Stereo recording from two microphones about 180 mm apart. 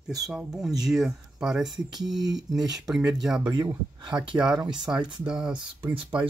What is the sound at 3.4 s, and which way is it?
Speech, 25° right (ahead or behind).